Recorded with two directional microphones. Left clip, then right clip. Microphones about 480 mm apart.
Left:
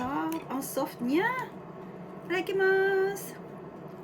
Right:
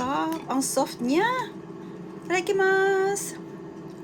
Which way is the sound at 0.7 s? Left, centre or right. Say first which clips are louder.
Right 3 dB; centre.